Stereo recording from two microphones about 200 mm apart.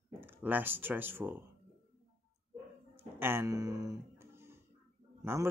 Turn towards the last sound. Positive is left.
turn(degrees=-15)  # may be behind; listen again after turning